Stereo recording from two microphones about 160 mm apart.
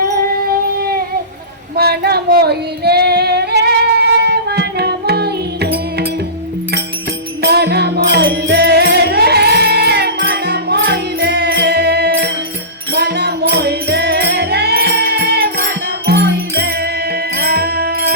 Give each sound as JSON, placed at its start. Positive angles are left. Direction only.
{"t": 1.7, "sound": "female singing", "side_deg": -75}
{"t": 4.2, "sound": "music", "side_deg": -90}
{"t": 7.4, "sound": "music", "side_deg": -90}